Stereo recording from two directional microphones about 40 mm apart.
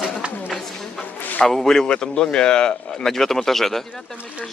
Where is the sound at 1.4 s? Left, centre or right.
Centre.